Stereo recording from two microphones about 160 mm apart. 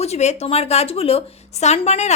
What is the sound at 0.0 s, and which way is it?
A woman's voice, 45° left (ahead or behind).